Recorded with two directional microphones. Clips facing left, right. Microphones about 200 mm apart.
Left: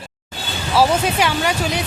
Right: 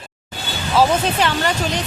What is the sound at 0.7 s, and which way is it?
Speech, 10° left (ahead or behind).